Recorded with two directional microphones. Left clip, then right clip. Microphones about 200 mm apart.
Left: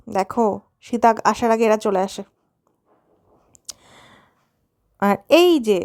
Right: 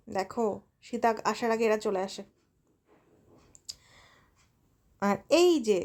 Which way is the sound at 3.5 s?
40° left (ahead or behind).